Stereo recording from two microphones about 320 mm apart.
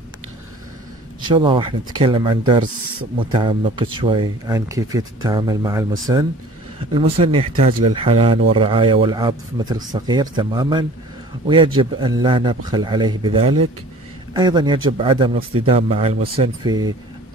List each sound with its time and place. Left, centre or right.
1.2 s speech: centre